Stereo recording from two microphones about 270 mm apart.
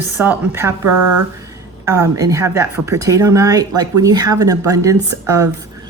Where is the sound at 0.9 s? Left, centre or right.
Right.